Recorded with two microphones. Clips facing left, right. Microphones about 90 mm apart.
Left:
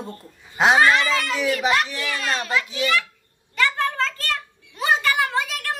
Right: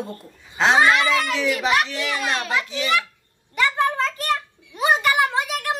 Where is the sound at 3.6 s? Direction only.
15° right (ahead or behind).